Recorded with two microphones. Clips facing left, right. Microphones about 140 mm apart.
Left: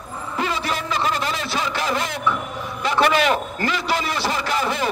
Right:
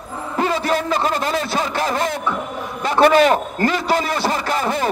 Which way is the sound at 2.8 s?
45° right (ahead or behind).